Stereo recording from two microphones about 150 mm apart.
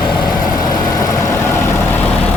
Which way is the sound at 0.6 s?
20° left (ahead or behind).